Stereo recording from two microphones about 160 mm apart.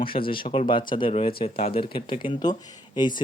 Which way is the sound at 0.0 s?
35° left (ahead or behind).